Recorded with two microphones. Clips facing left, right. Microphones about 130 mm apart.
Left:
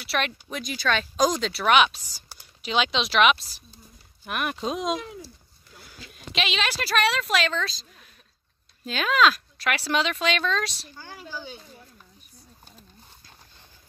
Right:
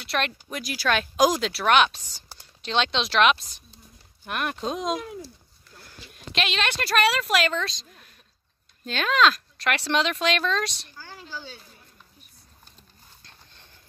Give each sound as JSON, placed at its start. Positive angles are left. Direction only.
{"t": 0.0, "sound": "speech", "side_deg": 0}
{"t": 11.0, "sound": "speech", "side_deg": 15}